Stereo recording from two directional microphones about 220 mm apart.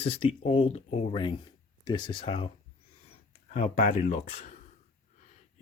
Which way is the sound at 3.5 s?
30° left (ahead or behind).